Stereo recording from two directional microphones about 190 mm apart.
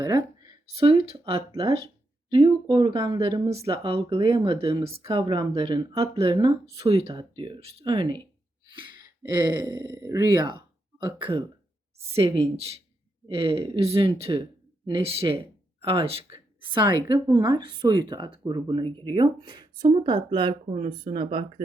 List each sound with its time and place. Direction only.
0.0 s a sound: 20° right (ahead or behind)
0.8 s speech: 30° right (ahead or behind)
9.3 s a woman's voice: 20° right (ahead or behind)